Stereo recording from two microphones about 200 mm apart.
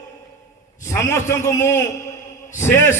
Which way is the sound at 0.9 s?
15° left (ahead or behind).